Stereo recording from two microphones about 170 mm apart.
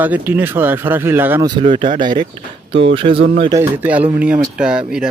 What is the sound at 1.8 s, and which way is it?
Speech, 50° right (ahead or behind).